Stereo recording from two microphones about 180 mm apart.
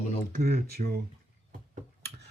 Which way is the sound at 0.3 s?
60° right (ahead or behind).